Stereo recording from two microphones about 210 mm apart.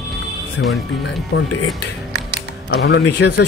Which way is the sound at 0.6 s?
55° left (ahead or behind).